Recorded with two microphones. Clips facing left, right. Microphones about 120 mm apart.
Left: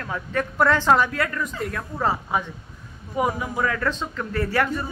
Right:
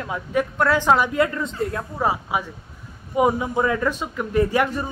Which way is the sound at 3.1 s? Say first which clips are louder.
Right 5 dB; 20° right (ahead or behind).